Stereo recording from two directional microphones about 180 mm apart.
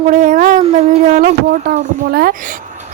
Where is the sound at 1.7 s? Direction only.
45° right (ahead or behind).